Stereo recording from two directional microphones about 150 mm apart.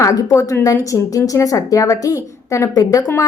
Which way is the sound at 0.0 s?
20° left (ahead or behind).